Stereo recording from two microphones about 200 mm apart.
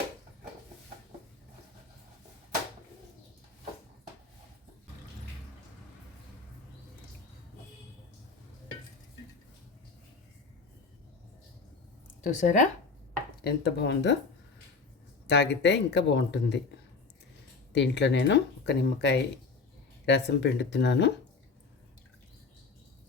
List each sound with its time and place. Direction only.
12.2 s speech: 40° left (ahead or behind)
13.4 s speech: 55° left (ahead or behind)
15.3 s speech: 60° left (ahead or behind)
17.7 s speech: 60° left (ahead or behind)